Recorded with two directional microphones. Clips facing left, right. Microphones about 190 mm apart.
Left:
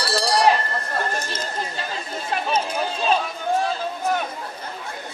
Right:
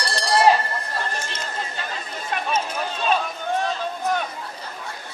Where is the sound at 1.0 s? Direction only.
40° left (ahead or behind).